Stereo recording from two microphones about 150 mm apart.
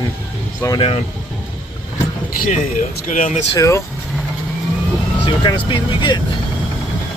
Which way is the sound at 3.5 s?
20° left (ahead or behind).